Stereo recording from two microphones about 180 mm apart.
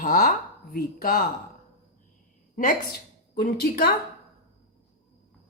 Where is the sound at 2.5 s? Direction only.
50° left (ahead or behind).